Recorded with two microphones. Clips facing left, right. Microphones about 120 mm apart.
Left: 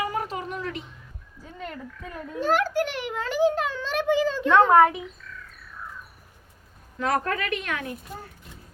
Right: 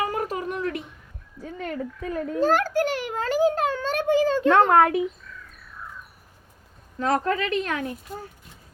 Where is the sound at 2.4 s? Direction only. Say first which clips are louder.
Right 2 dB; 40° right (ahead or behind).